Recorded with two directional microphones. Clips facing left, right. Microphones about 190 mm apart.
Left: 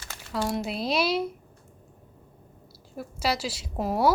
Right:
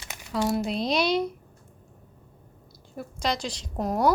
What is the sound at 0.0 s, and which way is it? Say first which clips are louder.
Crumpling: right 2 dB; 15° right (ahead or behind).